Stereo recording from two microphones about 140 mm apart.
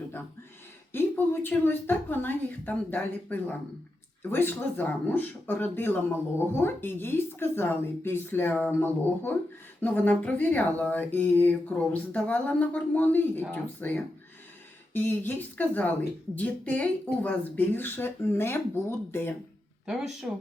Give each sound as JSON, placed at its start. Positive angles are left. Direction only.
{"t": 0.9, "sound": "speech", "side_deg": 15}
{"t": 19.8, "sound": "speech", "side_deg": -5}